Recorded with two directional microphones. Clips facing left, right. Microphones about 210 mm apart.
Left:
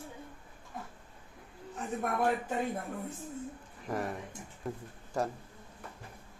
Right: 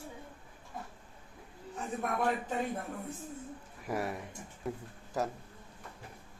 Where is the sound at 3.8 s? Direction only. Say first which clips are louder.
Even; 10° right (ahead or behind).